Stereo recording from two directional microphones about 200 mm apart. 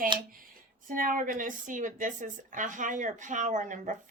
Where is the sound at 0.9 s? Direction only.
45° right (ahead or behind).